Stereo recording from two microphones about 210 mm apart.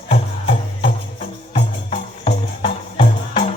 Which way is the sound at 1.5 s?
30° left (ahead or behind).